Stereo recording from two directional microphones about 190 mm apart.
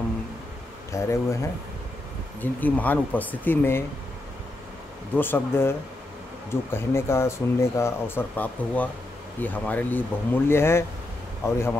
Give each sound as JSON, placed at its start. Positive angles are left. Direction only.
{"t": 0.9, "sound": "speech", "side_deg": 15}
{"t": 2.4, "sound": "speech", "side_deg": 10}
{"t": 5.1, "sound": "speech", "side_deg": 10}